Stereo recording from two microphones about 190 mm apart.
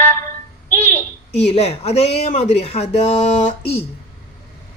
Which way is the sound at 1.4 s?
35° left (ahead or behind).